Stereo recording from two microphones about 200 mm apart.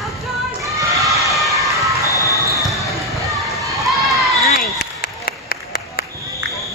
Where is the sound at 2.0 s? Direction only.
15° left (ahead or behind).